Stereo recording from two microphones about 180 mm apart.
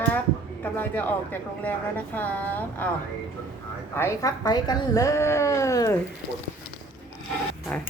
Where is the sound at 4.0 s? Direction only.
20° left (ahead or behind).